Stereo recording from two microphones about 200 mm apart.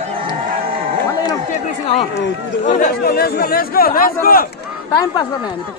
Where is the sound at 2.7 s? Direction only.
45° left (ahead or behind).